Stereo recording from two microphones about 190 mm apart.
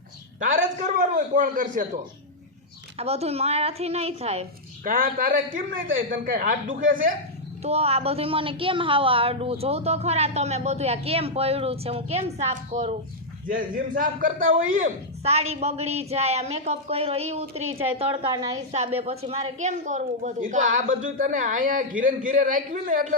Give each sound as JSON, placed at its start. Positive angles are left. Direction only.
{"t": 0.8, "sound": "a man's voice", "side_deg": -40}
{"t": 3.0, "sound": "speech", "side_deg": -35}
{"t": 4.9, "sound": "a man's voice", "side_deg": -45}
{"t": 7.6, "sound": "a man's voice", "side_deg": -35}
{"t": 18.3, "sound": "a woman's voice", "side_deg": -20}
{"t": 18.7, "sound": "a man's voice", "side_deg": -35}